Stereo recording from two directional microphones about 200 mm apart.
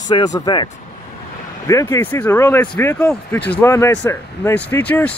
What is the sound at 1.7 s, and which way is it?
Speech, 15° left (ahead or behind).